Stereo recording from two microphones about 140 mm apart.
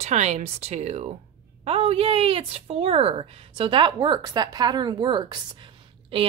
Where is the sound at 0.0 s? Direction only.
55° right (ahead or behind).